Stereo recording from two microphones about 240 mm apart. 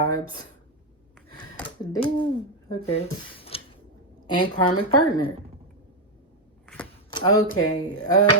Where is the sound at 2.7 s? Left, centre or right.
Left.